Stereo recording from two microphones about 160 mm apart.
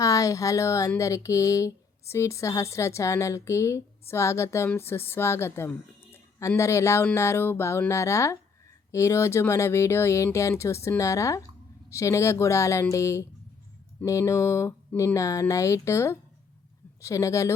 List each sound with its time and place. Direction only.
0.0 s speech: 20° left (ahead or behind)